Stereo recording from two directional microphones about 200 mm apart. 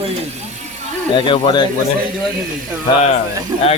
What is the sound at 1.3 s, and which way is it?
Speech, 25° left (ahead or behind).